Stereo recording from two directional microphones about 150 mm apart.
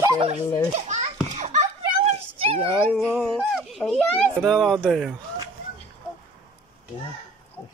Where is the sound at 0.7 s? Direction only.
50° right (ahead or behind).